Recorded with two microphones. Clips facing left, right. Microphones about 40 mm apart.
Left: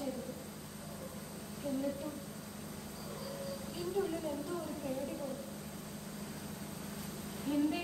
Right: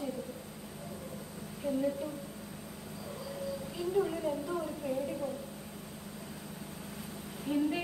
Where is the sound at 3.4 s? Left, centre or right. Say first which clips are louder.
Right 6 dB; centre.